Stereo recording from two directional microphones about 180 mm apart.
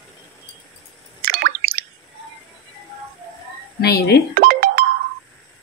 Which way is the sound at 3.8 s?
65° left (ahead or behind).